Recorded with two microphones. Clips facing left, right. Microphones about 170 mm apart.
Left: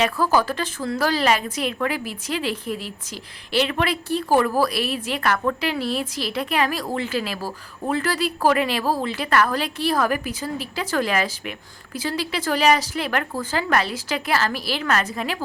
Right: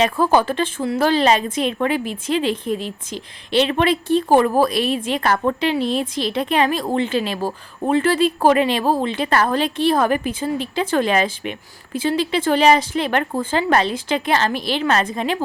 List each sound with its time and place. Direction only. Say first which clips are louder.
0.0 s a woman's voice: right 3 dB; 25° right (ahead or behind)